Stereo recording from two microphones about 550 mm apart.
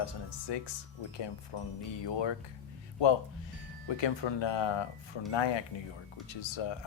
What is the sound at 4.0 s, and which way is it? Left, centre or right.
Speech, left.